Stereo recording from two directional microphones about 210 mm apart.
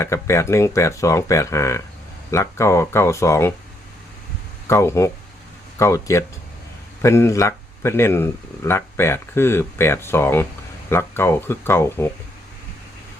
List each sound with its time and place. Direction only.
0.0 s speech: 15° left (ahead or behind)
4.7 s speech: 15° left (ahead or behind)